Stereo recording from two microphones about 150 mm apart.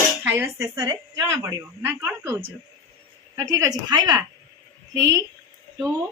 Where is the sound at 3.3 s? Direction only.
25° right (ahead or behind).